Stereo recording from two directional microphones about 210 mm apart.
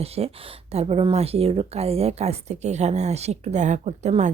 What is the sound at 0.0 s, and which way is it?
Speech, 30° right (ahead or behind).